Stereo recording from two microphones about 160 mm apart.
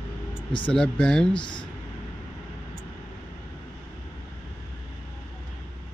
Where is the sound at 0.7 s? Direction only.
5° left (ahead or behind).